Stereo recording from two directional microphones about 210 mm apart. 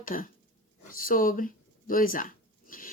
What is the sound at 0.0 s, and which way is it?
A woman's voice, 40° left (ahead or behind).